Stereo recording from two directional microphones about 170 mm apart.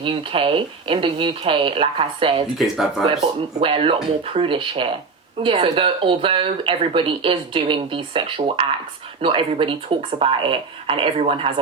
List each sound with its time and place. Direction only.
0.0 s speech: 30° right (ahead or behind)
2.6 s speech: centre (ahead or behind)
3.2 s speech: 35° right (ahead or behind)